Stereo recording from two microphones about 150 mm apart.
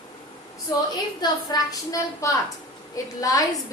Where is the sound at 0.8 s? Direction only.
25° left (ahead or behind).